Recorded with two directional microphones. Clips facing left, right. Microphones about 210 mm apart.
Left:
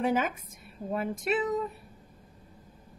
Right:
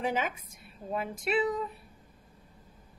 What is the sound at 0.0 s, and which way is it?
A woman's voice, 50° left (ahead or behind).